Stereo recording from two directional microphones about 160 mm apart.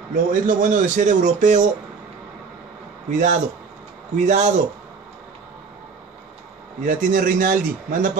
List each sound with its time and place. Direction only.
0.1 s speech: 55° right (ahead or behind)
3.1 s speech: 50° right (ahead or behind)
6.8 s speech: 55° right (ahead or behind)